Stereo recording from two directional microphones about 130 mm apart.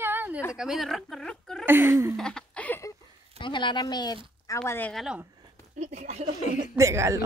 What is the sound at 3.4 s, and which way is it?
Speech, 35° left (ahead or behind).